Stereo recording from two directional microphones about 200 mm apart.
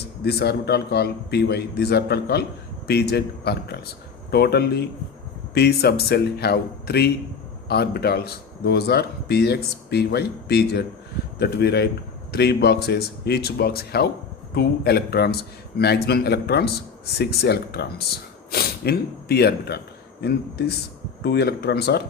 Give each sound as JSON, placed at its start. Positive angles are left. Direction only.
{"t": 0.2, "sound": "a man's voice", "side_deg": 55}